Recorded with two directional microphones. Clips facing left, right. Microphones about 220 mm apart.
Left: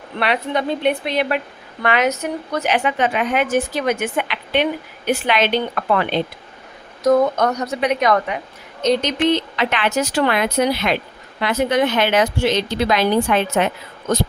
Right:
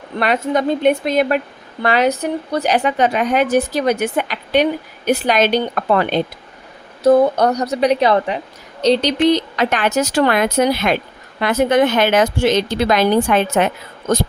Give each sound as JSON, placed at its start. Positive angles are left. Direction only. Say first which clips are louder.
{"t": 0.2, "sound": "speech", "louder": "right 3 dB", "side_deg": -45}
{"t": 1.8, "sound": "a woman's voice", "louder": "right 3 dB", "side_deg": -35}
{"t": 7.0, "sound": "a woman's voice", "louder": "right 3 dB", "side_deg": -30}